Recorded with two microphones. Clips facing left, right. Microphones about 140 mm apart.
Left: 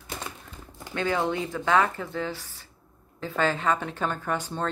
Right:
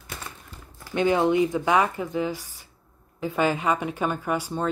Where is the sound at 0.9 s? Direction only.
20° right (ahead or behind).